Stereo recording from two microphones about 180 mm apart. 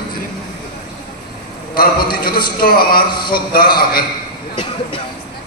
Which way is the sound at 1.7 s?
55° left (ahead or behind).